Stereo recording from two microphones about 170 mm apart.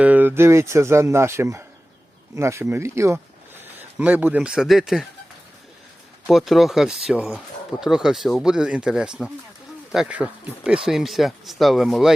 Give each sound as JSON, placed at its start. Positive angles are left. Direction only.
{"t": 0.0, "sound": "speech", "side_deg": -10}
{"t": 6.2, "sound": "speech", "side_deg": 0}